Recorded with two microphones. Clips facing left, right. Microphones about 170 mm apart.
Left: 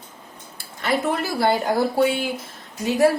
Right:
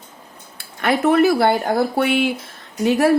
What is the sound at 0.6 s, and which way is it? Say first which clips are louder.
Speech: right 5 dB; 65° right (ahead or behind).